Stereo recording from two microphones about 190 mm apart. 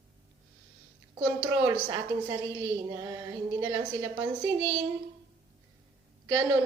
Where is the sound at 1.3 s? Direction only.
10° right (ahead or behind).